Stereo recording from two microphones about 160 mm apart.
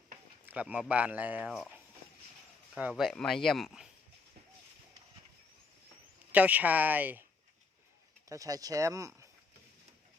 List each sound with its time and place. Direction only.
0.4 s speech: 10° right (ahead or behind)
2.9 s speech: centre (ahead or behind)
6.3 s speech: 10° right (ahead or behind)
8.3 s speech: 20° right (ahead or behind)